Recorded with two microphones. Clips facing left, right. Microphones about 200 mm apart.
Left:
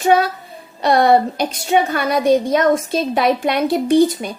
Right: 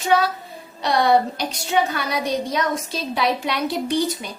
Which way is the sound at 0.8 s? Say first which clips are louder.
Left 5 dB; 55° left (ahead or behind).